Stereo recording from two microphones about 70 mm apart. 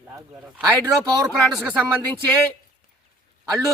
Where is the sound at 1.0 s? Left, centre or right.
Right.